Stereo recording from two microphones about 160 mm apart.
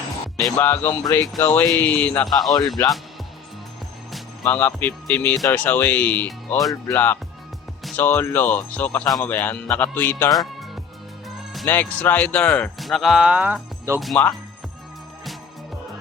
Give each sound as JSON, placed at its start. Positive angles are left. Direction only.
{"t": 0.5, "sound": "speech", "side_deg": 10}
{"t": 2.5, "sound": "speech", "side_deg": 25}
{"t": 4.4, "sound": "speech", "side_deg": 10}
{"t": 11.6, "sound": "speech", "side_deg": 10}
{"t": 14.0, "sound": "speech", "side_deg": 0}